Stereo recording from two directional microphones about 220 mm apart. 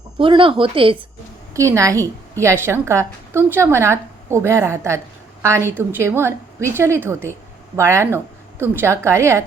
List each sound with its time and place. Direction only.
0.2 s a woman's voice: 25° right (ahead or behind)